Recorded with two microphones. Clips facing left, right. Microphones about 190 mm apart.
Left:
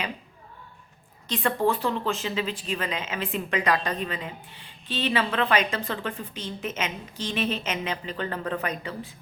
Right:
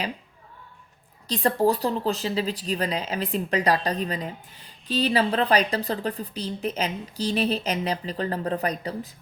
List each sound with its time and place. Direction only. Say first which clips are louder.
1.3 s speech: right 3 dB; 35° right (ahead or behind)